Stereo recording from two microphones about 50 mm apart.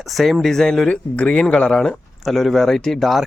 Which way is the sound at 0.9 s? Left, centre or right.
Left.